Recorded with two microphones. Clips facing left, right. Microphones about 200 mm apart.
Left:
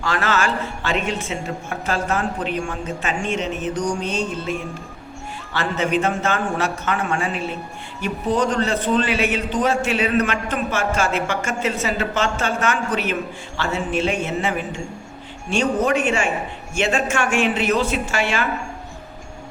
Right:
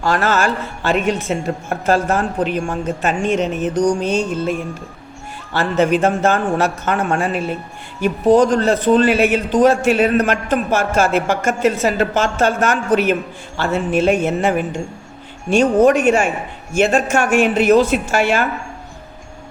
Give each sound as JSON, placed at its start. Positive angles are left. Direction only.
{"t": 0.1, "sound": "speech", "side_deg": -45}
{"t": 5.5, "sound": "speech", "side_deg": -50}